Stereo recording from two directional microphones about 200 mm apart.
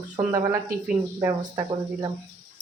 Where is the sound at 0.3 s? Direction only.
15° right (ahead or behind).